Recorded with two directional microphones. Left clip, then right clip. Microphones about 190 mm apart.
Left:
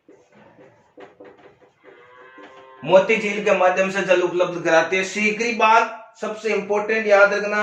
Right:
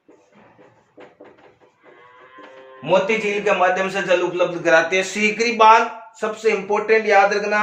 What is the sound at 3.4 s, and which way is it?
A man's voice, 30° right (ahead or behind).